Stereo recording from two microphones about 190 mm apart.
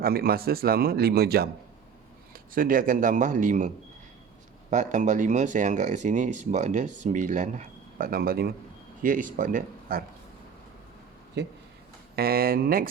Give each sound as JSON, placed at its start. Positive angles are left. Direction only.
{"t": 0.0, "sound": "speech", "side_deg": -55}
{"t": 4.7, "sound": "speech", "side_deg": -40}
{"t": 11.4, "sound": "speech", "side_deg": -60}